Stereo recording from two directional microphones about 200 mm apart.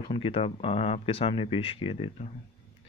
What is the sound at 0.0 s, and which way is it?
Speech, 25° left (ahead or behind).